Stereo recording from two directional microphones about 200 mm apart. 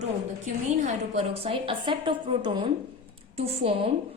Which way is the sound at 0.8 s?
30° right (ahead or behind).